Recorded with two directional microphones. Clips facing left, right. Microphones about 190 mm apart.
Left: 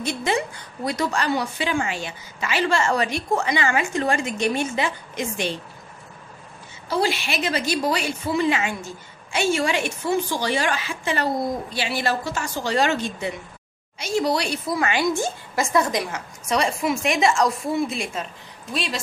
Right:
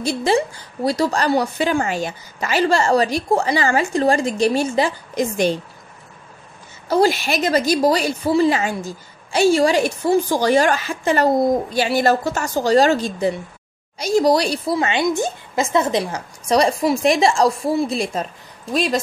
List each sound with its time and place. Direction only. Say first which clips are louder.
0.0 s a woman's voice: right 6 dB; 35° right (ahead or behind)
6.9 s a woman's voice: right 7 dB; 45° right (ahead or behind)